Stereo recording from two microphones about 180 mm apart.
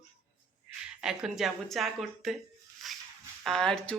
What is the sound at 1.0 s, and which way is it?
Speech, centre (ahead or behind).